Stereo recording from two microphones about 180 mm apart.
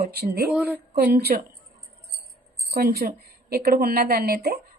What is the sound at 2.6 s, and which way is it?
A woman's voice, 55° right (ahead or behind).